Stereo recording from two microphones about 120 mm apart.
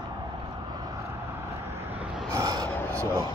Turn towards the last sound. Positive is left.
turn(degrees=-20)  # may be behind; listen again after turning